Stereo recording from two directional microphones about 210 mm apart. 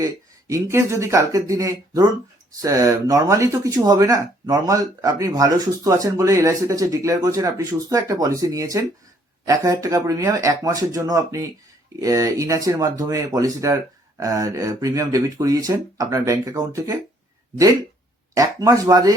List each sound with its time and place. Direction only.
0.0 s speech: 15° right (ahead or behind)
18.3 s speech: 15° right (ahead or behind)